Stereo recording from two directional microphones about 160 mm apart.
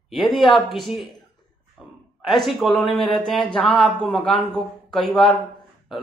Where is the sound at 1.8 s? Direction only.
5° right (ahead or behind).